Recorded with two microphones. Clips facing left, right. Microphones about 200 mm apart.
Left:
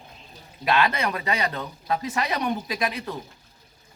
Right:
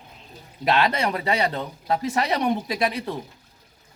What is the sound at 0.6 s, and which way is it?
Speech, 35° right (ahead or behind).